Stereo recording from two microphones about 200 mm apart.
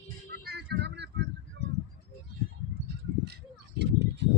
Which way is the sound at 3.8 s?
60° right (ahead or behind).